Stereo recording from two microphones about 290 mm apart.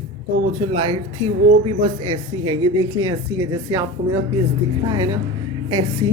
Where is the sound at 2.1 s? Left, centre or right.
Centre.